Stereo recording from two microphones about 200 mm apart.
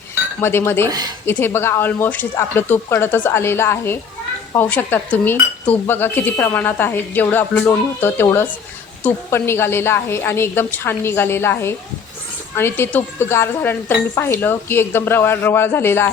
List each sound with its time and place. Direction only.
0.4 s speech: 10° left (ahead or behind)
0.9 s speech: 20° right (ahead or behind)
1.3 s speech: 10° left (ahead or behind)